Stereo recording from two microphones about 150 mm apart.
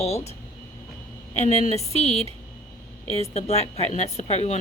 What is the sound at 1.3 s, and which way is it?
A woman's voice, 45° left (ahead or behind).